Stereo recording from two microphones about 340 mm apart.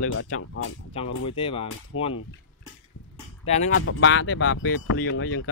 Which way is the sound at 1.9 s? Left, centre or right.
Left.